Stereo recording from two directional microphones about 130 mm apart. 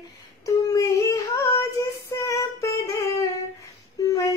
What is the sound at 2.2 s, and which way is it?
Singing, 25° left (ahead or behind).